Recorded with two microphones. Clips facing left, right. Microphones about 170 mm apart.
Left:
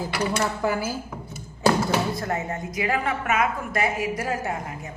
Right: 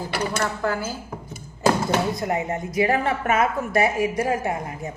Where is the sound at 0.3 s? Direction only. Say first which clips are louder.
Even; 15° left (ahead or behind).